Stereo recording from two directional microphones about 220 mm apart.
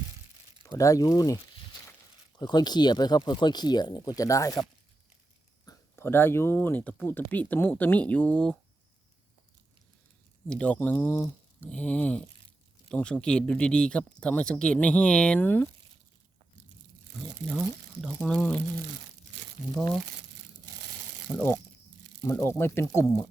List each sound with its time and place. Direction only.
0.6 s speech: 15° left (ahead or behind)
5.6 s speech: 10° left (ahead or behind)
10.5 s speech: 5° left (ahead or behind)
18.0 s speech: 5° left (ahead or behind)
19.7 s speech: 5° left (ahead or behind)
21.2 s speech: 10° left (ahead or behind)